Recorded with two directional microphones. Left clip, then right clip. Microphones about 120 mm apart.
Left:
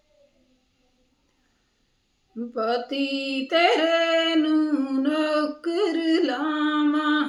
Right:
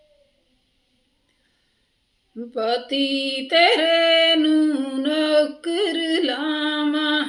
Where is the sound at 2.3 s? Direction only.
20° right (ahead or behind).